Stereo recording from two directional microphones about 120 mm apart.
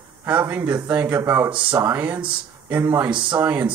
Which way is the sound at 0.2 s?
15° right (ahead or behind).